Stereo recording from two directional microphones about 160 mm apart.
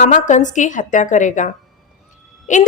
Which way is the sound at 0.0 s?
50° left (ahead or behind).